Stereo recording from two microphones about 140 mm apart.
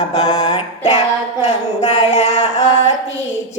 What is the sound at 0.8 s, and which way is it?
Female singing, 55° left (ahead or behind).